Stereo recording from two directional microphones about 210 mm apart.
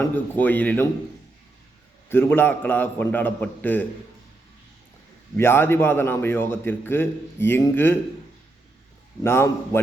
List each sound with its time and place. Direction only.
0.0 s a man's voice: 10° left (ahead or behind)
2.0 s a man's voice: 10° left (ahead or behind)
5.4 s a man's voice: 10° left (ahead or behind)
9.2 s a man's voice: 10° left (ahead or behind)